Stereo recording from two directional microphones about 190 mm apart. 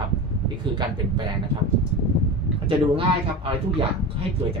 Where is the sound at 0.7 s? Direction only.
25° right (ahead or behind).